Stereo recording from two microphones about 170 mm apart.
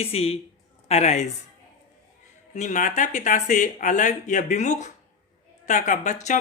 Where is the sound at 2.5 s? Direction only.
45° left (ahead or behind).